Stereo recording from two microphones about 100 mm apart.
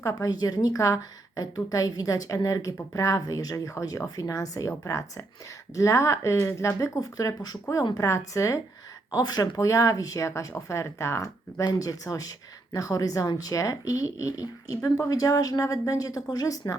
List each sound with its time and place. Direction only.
0.0 s speech: 30° left (ahead or behind)
11.6 s speech: 40° left (ahead or behind)